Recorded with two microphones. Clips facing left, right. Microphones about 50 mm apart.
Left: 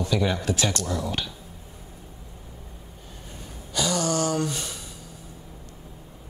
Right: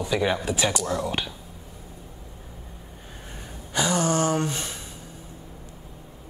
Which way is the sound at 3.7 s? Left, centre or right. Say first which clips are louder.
Right 2 dB; right.